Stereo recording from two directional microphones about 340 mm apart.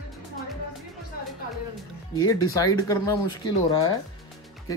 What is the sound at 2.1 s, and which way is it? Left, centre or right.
Speech, centre.